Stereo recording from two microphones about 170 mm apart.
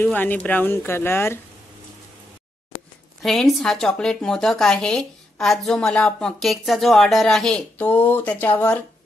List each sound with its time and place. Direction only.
0.0 s speech: 10° left (ahead or behind)
3.2 s speech: centre (ahead or behind)